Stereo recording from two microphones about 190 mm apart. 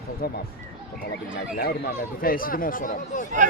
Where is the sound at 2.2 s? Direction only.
50° left (ahead or behind).